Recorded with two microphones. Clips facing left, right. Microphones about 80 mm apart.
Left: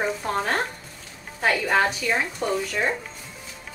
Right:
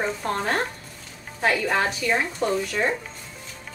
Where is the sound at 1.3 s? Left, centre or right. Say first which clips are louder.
Left 1 dB; centre.